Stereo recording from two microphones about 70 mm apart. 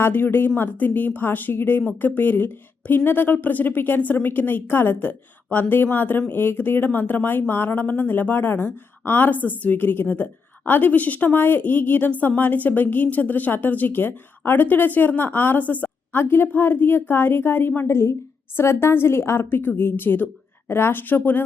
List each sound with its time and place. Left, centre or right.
0.0 s a woman's voice: left